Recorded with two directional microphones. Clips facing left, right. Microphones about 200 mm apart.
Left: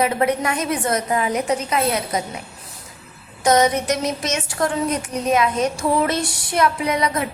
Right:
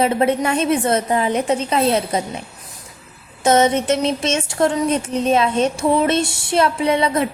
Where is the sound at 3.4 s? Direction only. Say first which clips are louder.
Right 2 dB; 25° right (ahead or behind).